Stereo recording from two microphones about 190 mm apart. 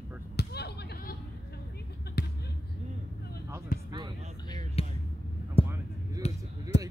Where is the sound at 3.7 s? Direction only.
50° left (ahead or behind).